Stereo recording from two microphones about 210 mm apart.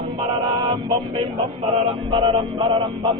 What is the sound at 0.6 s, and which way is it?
Music, 25° right (ahead or behind).